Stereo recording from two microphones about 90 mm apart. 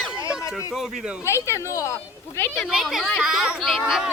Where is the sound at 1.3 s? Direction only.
30° left (ahead or behind).